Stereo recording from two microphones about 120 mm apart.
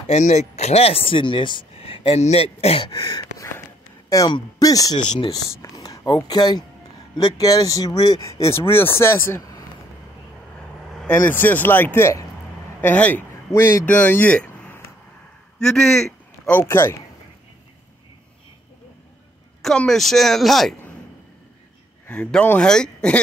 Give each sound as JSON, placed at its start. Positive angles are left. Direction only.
{"t": 0.0, "sound": "speech", "side_deg": 70}
{"t": 3.0, "sound": "speech", "side_deg": 30}
{"t": 8.2, "sound": "speech", "side_deg": 25}
{"t": 11.0, "sound": "speech", "side_deg": 15}
{"t": 16.5, "sound": "speech", "side_deg": 20}
{"t": 19.6, "sound": "speech", "side_deg": 5}
{"t": 22.0, "sound": "speech", "side_deg": 15}